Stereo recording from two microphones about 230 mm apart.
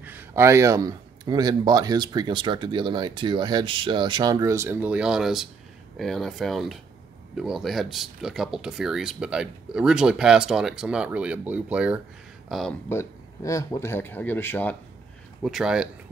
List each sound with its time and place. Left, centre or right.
0.0 s speech: centre
12.9 s speech: centre
15.4 s speech: centre